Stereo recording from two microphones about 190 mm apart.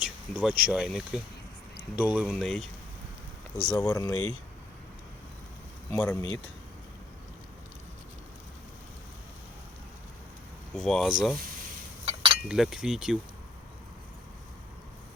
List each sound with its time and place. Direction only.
0.0 s speech: 5° right (ahead or behind)
3.7 s speech: 20° left (ahead or behind)
5.9 s speech: 10° left (ahead or behind)
10.8 s speech: centre (ahead or behind)
12.0 s chink: 30° right (ahead or behind)
12.5 s speech: 5° right (ahead or behind)